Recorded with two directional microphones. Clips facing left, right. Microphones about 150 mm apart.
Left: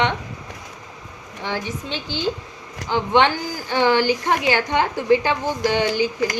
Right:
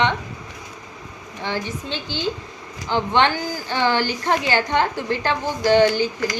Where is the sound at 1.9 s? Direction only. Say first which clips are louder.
Left 3 dB; 45° left (ahead or behind).